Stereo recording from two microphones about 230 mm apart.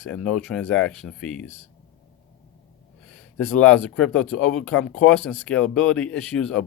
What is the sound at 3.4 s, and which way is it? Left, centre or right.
Speech, centre.